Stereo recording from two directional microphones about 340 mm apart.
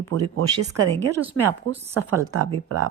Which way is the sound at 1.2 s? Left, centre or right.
Centre.